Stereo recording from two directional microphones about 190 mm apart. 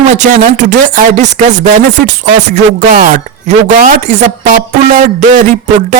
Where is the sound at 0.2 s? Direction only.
40° right (ahead or behind).